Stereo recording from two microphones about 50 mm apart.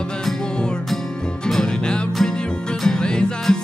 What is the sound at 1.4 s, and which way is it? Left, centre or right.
Music, centre.